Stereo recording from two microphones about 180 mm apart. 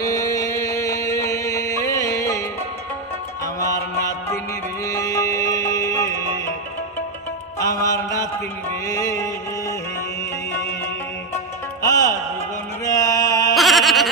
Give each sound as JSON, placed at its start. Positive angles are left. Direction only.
{"t": 0.0, "sound": "music", "side_deg": 20}
{"t": 4.8, "sound": "music", "side_deg": 20}
{"t": 7.5, "sound": "music", "side_deg": 20}
{"t": 11.8, "sound": "music", "side_deg": 20}
{"t": 12.8, "sound": "mantra", "side_deg": 20}
{"t": 13.6, "sound": "goat", "side_deg": 0}